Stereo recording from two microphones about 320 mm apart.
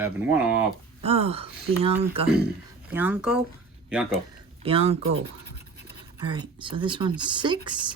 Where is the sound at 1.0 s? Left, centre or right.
Centre.